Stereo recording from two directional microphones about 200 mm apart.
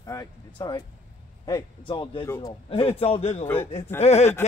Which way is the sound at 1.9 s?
25° left (ahead or behind).